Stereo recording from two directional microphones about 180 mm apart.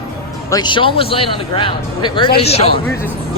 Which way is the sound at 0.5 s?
25° left (ahead or behind).